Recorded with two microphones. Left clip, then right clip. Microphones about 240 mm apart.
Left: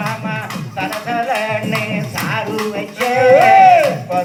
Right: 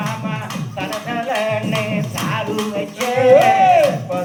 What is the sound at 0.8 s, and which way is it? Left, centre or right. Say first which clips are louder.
Music: left 4 dB; left.